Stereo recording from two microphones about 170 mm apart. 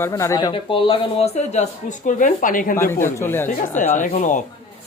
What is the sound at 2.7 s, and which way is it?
Speech, 15° left (ahead or behind).